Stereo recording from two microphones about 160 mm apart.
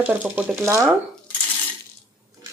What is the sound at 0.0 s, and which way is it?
Speech, 10° right (ahead or behind).